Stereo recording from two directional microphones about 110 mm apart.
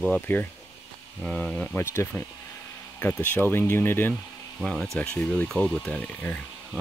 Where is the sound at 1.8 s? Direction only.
25° left (ahead or behind).